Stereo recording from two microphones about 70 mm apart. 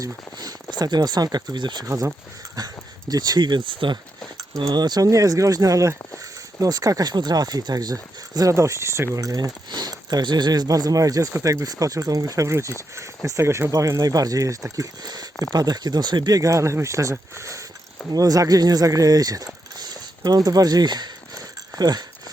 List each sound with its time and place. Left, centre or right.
0.0 s speech: right
2.6 s speech: right
4.5 s speech: right
6.6 s speech: right
8.5 s speech: right
15.5 s speech: right
18.1 s speech: right
19.8 s a sound: right